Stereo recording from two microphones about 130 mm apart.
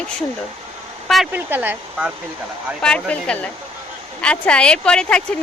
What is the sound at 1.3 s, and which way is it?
Speech, 15° right (ahead or behind).